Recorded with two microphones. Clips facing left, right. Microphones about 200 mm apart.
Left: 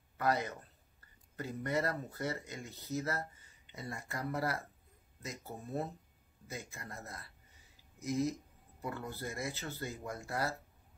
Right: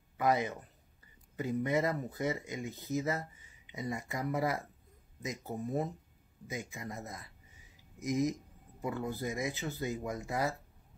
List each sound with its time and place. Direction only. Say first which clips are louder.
0.2 s speech: right 3 dB; 15° right (ahead or behind)